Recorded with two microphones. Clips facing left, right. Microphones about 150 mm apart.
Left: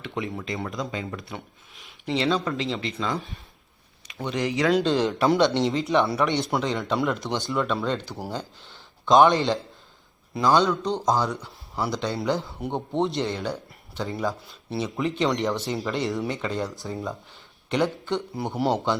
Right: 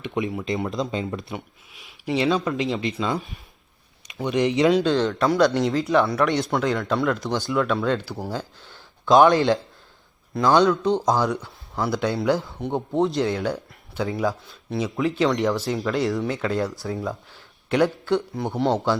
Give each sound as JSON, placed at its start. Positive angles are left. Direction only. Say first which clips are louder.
{"t": 0.0, "sound": "speech", "louder": "right 5 dB", "side_deg": -15}
{"t": 2.0, "sound": "speech", "louder": "right 2 dB", "side_deg": -15}
{"t": 4.7, "sound": "speech", "louder": "right 2 dB", "side_deg": 0}
{"t": 4.9, "sound": "speech", "louder": "even", "side_deg": 15}
{"t": 5.6, "sound": "a man's voice", "louder": "right 2 dB", "side_deg": 0}
{"t": 10.5, "sound": "speech", "louder": "right 4 dB", "side_deg": -10}
{"t": 11.3, "sound": "speech", "louder": "right 5 dB", "side_deg": 0}